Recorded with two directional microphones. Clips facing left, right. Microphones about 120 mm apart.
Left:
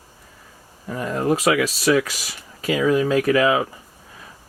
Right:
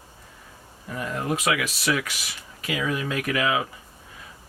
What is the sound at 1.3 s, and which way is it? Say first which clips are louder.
Speech: left 5 dB; 35° left (ahead or behind).